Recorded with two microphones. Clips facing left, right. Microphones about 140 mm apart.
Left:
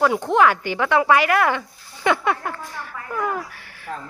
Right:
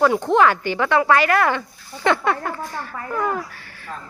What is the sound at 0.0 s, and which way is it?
A man's voice, 5° left (ahead or behind).